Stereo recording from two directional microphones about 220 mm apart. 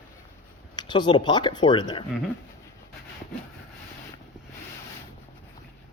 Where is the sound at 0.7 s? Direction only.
20° left (ahead or behind).